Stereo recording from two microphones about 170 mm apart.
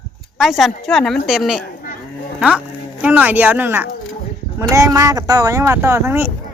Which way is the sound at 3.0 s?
10° right (ahead or behind).